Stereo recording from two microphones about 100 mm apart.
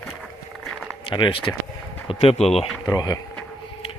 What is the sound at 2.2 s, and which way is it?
Speech, 90° left.